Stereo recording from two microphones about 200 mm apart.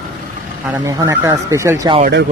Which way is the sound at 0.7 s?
15° right (ahead or behind).